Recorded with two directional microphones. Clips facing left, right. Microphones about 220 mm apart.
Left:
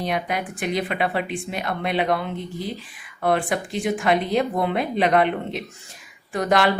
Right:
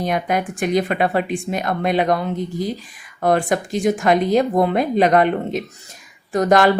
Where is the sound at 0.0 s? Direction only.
45° right (ahead or behind).